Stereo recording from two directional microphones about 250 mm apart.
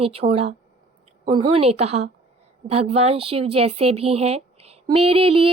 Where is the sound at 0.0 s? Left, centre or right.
Right.